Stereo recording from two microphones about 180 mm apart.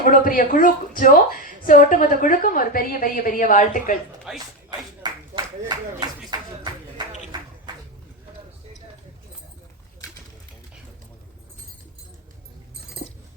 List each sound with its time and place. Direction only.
0.0 s speech: 50° left (ahead or behind)
4.3 s speech: centre (ahead or behind)
5.0 s a sound: 25° right (ahead or behind)